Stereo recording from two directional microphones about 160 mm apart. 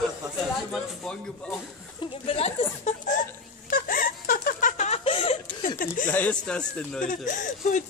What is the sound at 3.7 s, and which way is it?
Laughter, 65° left (ahead or behind).